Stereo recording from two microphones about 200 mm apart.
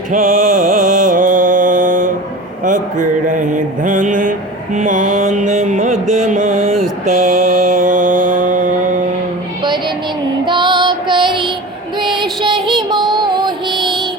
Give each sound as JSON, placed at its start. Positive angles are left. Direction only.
{"t": 0.1, "sound": "music", "side_deg": -40}
{"t": 2.6, "sound": "mantra", "side_deg": -40}
{"t": 10.4, "sound": "child singing", "side_deg": -25}
{"t": 12.1, "sound": "music", "side_deg": -25}